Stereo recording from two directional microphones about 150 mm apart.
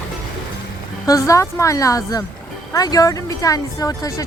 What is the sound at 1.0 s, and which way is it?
Speech, 20° left (ahead or behind).